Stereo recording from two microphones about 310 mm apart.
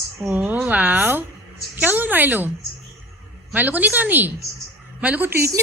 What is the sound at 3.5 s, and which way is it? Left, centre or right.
A woman's voice, centre.